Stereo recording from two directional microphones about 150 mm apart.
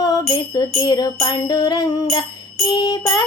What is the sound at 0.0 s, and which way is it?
Music, 25° left (ahead or behind).